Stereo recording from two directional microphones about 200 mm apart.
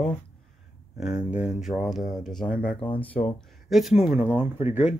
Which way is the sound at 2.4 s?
45° left (ahead or behind).